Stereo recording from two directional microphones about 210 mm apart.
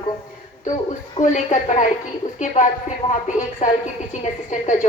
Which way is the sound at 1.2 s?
35° left (ahead or behind).